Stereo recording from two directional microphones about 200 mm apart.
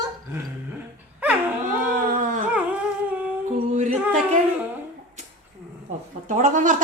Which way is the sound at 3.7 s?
35° right (ahead or behind).